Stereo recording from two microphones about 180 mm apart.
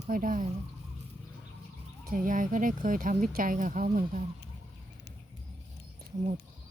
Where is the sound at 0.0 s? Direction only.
45° right (ahead or behind).